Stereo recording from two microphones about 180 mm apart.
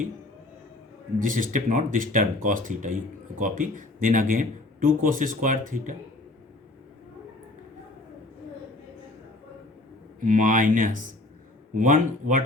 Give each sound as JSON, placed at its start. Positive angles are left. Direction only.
{"t": 1.2, "sound": "speech", "side_deg": -50}
{"t": 10.2, "sound": "speech", "side_deg": -45}